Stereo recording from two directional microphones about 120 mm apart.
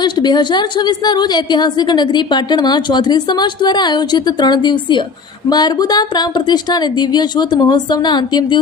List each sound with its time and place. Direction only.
0.0 s a woman's voice: 35° left (ahead or behind)